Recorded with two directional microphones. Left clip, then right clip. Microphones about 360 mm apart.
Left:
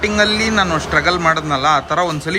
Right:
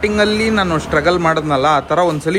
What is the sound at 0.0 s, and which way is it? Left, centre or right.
A man's voice, centre.